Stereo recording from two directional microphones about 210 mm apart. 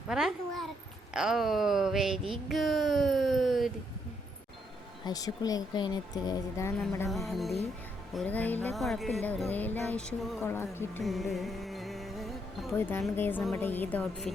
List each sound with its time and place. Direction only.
0.1 s babbling: centre (ahead or behind)
1.1 s a sound: centre (ahead or behind)
5.0 s speech: 20° left (ahead or behind)
7.3 s music: centre (ahead or behind)
10.4 s speech: 10° left (ahead or behind)
11.0 s music: centre (ahead or behind)
12.7 s speech: 10° left (ahead or behind)